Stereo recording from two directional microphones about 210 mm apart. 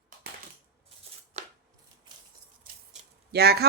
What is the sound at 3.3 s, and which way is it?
Speech, 50° right (ahead or behind).